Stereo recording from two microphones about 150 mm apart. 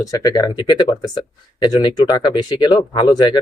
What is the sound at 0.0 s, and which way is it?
Speech, 25° left (ahead or behind).